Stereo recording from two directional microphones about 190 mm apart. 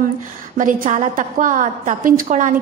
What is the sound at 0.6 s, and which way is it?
A woman's voice, 45° right (ahead or behind).